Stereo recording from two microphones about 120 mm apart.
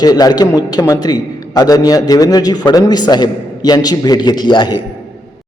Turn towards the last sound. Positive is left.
turn(degrees=40)  # may be behind; listen again after turning